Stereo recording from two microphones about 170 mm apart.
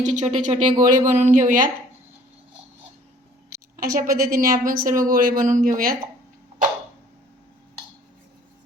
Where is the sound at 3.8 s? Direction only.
55° right (ahead or behind).